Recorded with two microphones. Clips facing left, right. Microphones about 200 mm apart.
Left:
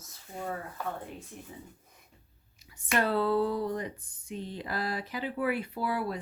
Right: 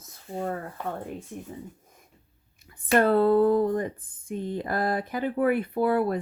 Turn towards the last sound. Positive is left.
turn(degrees=-55)  # may be behind; listen again after turning